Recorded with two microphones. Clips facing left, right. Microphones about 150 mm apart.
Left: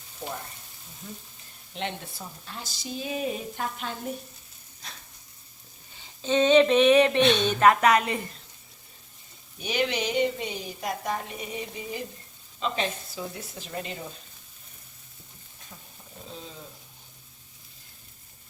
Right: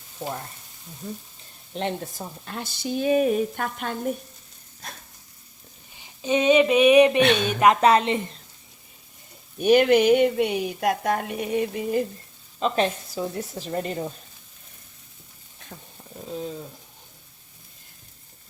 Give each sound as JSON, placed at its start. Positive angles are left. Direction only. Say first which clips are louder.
{"t": 1.7, "sound": "speech", "louder": "right 6 dB", "side_deg": -40}
{"t": 2.5, "sound": "a woman's voice", "louder": "right 8 dB", "side_deg": -60}
{"t": 4.8, "sound": "a sound", "louder": "right 5 dB", "side_deg": -50}
{"t": 6.0, "sound": "speech", "louder": "even", "side_deg": -15}
{"t": 7.2, "sound": "a woman's voice", "louder": "right 2 dB", "side_deg": -60}
{"t": 7.8, "sound": "a woman's voice", "louder": "right 4 dB", "side_deg": -30}
{"t": 9.6, "sound": "a woman's voice", "louder": "right 11 dB", "side_deg": -55}
{"t": 12.5, "sound": "a woman's voice", "louder": "right 6 dB", "side_deg": -45}